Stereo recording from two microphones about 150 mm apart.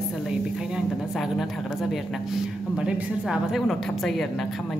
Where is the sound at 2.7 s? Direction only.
5° right (ahead or behind).